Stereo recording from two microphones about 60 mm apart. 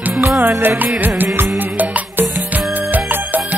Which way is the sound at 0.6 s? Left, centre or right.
Right.